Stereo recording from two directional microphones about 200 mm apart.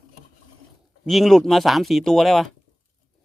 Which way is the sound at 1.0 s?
Centre (ahead or behind).